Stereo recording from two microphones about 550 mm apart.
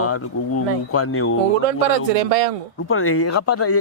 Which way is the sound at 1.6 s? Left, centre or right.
Right.